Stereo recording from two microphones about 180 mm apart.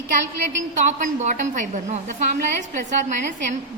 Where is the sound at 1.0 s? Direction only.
40° right (ahead or behind).